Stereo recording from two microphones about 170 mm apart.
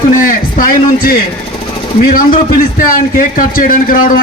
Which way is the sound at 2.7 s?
50° left (ahead or behind).